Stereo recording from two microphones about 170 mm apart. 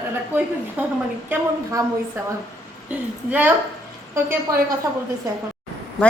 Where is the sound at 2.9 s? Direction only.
10° right (ahead or behind).